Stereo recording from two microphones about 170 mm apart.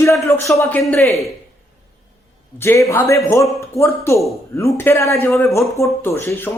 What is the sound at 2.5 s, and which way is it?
Speech, 15° left (ahead or behind).